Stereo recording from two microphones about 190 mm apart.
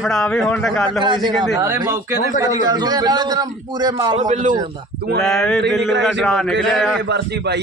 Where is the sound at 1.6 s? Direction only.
15° right (ahead or behind).